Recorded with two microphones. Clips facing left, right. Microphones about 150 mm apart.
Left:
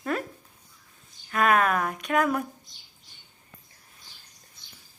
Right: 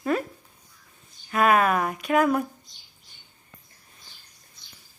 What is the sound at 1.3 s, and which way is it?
A woman's voice, 5° right (ahead or behind).